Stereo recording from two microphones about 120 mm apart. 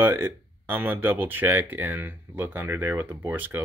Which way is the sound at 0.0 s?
20° right (ahead or behind).